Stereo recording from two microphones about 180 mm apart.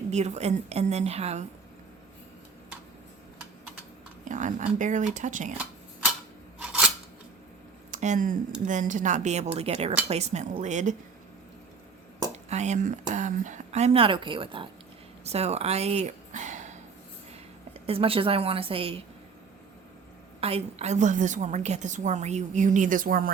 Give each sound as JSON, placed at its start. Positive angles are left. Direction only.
{"t": 0.1, "sound": "speech", "side_deg": -40}
{"t": 4.3, "sound": "a woman's voice", "side_deg": -45}
{"t": 6.6, "sound": "scissors", "side_deg": -5}
{"t": 7.9, "sound": "speech", "side_deg": -45}
{"t": 12.5, "sound": "speech", "side_deg": -40}
{"t": 15.2, "sound": "a sound", "side_deg": -35}
{"t": 17.7, "sound": "speech", "side_deg": -30}
{"t": 20.4, "sound": "a woman's voice", "side_deg": -35}